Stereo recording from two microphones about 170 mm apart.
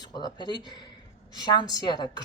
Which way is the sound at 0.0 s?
25° left (ahead or behind).